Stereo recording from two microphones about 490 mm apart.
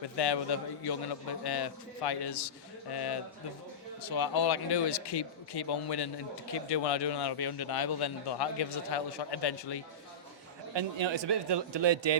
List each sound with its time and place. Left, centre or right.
0.0 s speech: left
10.8 s a man's voice: right